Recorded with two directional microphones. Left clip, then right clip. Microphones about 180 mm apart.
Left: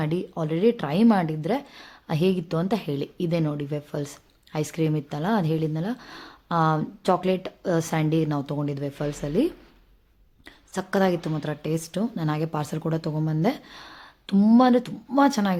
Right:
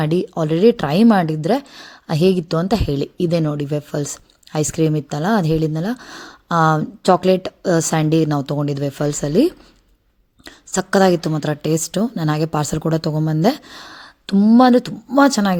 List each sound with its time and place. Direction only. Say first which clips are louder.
0.0 s a woman's voice: right 9 dB; 35° right (ahead or behind)
14.3 s speech: right 6 dB; 20° right (ahead or behind)
14.6 s a woman's voice: right 7 dB; 30° right (ahead or behind)